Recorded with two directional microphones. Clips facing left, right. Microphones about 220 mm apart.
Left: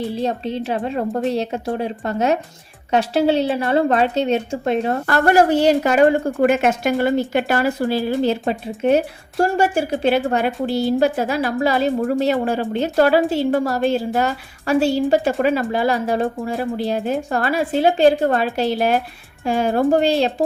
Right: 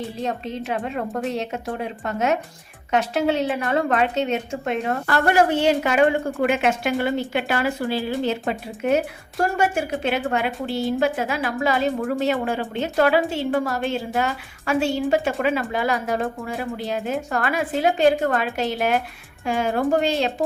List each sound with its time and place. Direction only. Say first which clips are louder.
0.2 s a woman's voice: left 5 dB; 30° left (ahead or behind)